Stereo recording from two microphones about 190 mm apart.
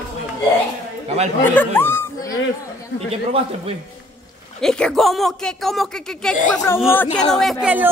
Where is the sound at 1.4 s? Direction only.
10° left (ahead or behind).